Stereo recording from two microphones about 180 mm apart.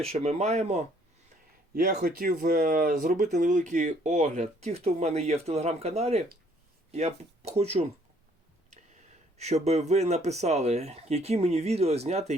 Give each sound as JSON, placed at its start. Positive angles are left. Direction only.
{"t": 0.0, "sound": "speech", "side_deg": -35}
{"t": 1.7, "sound": "speech", "side_deg": -55}
{"t": 9.4, "sound": "speech", "side_deg": -35}